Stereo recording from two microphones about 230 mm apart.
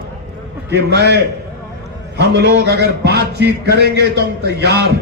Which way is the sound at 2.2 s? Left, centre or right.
Right.